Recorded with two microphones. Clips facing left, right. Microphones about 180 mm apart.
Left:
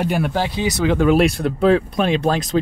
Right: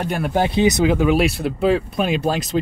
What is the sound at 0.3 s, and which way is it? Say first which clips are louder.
Speech: right 4 dB; 20° right (ahead or behind).